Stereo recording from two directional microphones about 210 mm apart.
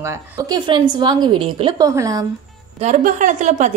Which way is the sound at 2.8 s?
35° right (ahead or behind).